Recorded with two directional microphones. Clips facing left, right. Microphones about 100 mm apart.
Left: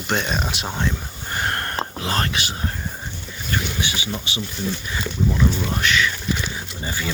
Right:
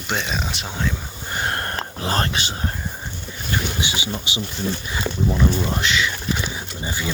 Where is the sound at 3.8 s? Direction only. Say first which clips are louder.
Right 1 dB; 20° right (ahead or behind).